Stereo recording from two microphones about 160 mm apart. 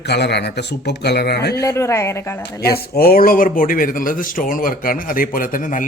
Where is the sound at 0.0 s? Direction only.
90° left.